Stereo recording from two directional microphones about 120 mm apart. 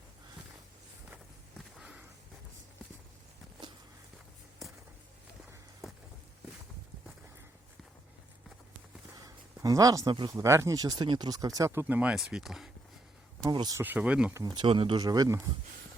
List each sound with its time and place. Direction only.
1.8 s a sound: 5° right (ahead or behind)
5.8 s a sound: 5° right (ahead or behind)
9.1 s a sound: 30° right (ahead or behind)
10.1 s speech: 40° right (ahead or behind)
10.3 s speech: 25° right (ahead or behind); by 12.7 s centre (ahead or behind)
13.4 s speech: 35° right (ahead or behind)
13.7 s speech: 15° right (ahead or behind)
14.3 s speech: 35° right (ahead or behind)
14.9 s speech: 30° right (ahead or behind)